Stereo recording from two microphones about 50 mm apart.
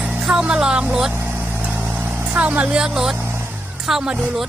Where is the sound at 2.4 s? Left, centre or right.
Right.